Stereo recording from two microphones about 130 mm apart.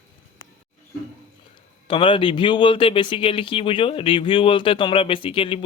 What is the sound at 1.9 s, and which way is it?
Speech, 40° left (ahead or behind).